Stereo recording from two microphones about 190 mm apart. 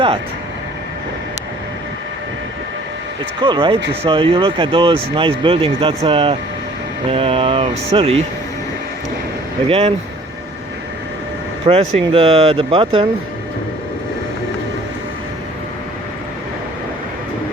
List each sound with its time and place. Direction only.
3.4 s speech: 25° right (ahead or behind)
9.6 s speech: 30° right (ahead or behind)
11.6 s speech: 30° right (ahead or behind)